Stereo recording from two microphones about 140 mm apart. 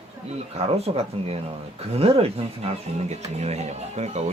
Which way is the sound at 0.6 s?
45° right (ahead or behind).